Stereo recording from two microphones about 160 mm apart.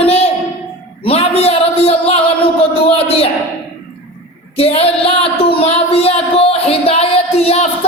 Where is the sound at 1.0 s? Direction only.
40° left (ahead or behind).